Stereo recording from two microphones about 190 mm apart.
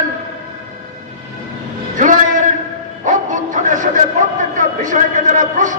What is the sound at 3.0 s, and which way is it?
A man's voice, 40° right (ahead or behind).